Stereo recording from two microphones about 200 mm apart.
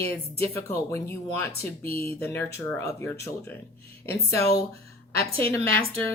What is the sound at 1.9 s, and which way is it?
Speech, 30° right (ahead or behind).